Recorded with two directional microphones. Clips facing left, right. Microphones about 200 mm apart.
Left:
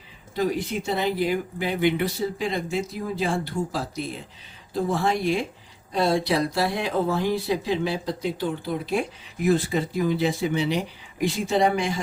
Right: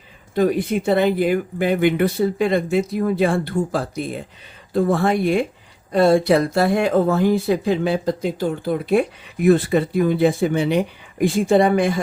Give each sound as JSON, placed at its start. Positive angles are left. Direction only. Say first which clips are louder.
{"t": 0.3, "sound": "speech", "louder": "right 7 dB", "side_deg": -55}